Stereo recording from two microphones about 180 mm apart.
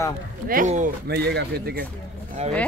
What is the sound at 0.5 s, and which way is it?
Speech, 45° right (ahead or behind).